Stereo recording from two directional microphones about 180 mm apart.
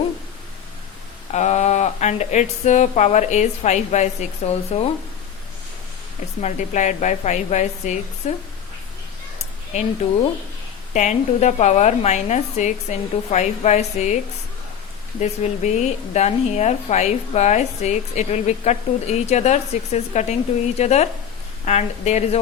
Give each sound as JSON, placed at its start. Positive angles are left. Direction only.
{"t": 1.3, "sound": "speech", "side_deg": 40}
{"t": 6.4, "sound": "speech", "side_deg": 40}
{"t": 10.9, "sound": "speech", "side_deg": 40}
{"t": 15.2, "sound": "speech", "side_deg": 40}